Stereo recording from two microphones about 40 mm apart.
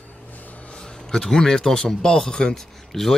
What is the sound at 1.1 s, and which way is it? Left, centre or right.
Speech, centre.